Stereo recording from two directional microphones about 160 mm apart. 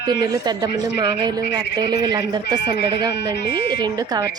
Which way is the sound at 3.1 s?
90° left.